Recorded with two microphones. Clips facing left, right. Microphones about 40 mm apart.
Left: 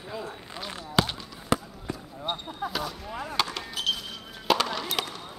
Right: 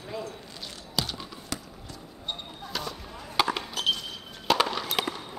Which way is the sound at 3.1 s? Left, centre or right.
Left.